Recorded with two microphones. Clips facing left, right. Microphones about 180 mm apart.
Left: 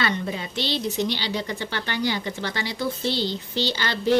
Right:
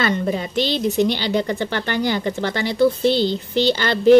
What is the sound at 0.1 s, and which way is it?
Speech, 45° right (ahead or behind).